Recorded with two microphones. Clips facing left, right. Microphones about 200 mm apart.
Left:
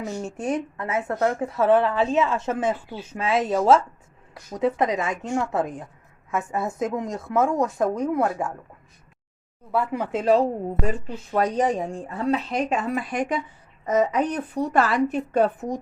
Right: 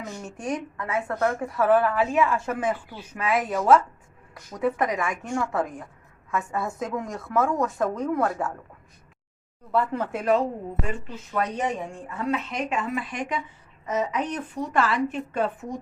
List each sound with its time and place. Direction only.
0.2 s speech: 25° left (ahead or behind)
9.7 s a woman's voice: 10° left (ahead or behind); by 15.8 s 40° left (ahead or behind)